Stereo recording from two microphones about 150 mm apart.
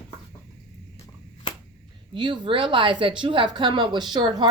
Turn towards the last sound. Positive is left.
turn(degrees=-30)  # may be behind; listen again after turning